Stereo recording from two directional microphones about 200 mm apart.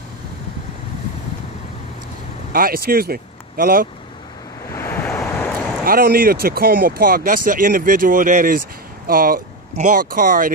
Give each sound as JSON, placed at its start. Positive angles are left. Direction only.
{"t": 2.5, "sound": "speech", "side_deg": -45}
{"t": 4.7, "sound": "waves", "side_deg": 15}
{"t": 5.9, "sound": "speech", "side_deg": -45}